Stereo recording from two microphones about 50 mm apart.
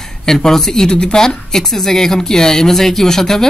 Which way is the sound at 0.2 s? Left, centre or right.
Centre.